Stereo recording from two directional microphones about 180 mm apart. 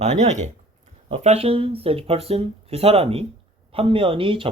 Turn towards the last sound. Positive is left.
turn(degrees=-30)  # may be behind; listen again after turning